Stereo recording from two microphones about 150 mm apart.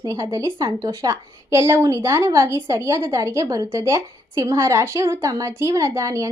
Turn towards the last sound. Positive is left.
turn(degrees=-20)  # may be behind; listen again after turning